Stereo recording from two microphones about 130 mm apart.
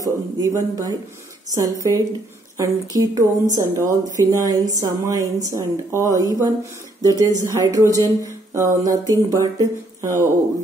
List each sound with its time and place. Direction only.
0.0 s a man's voice: 25° right (ahead or behind)